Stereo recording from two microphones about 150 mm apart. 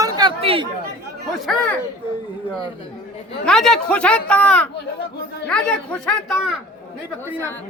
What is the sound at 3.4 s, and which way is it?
A man's voice, centre (ahead or behind).